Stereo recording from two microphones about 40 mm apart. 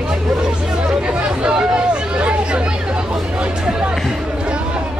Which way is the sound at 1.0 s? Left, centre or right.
Right.